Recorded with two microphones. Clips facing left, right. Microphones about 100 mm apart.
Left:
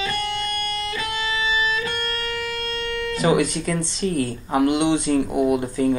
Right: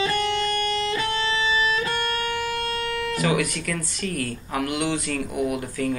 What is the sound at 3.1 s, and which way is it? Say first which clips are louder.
Speech: left 6 dB; 25° left (ahead or behind).